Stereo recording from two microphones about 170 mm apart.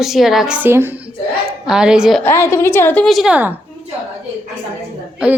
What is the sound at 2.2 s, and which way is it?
A woman's voice, 15° left (ahead or behind).